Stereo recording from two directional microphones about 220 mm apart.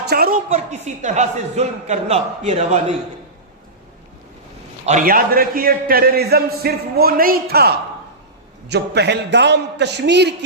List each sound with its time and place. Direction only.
0.1 s a man's voice: 45° right (ahead or behind)
0.5 s a man's voice: 30° right (ahead or behind)
4.9 s a man's voice: 40° right (ahead or behind)
8.7 s a man's voice: 50° right (ahead or behind)